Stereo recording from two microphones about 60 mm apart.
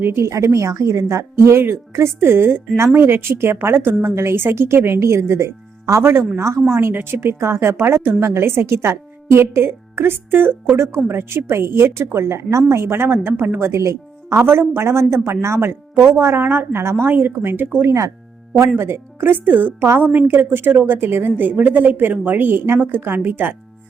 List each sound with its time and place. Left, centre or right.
0.1 s a woman's voice: right
13.7 s speech: right
17.8 s speech: right
18.8 s a woman's voice: right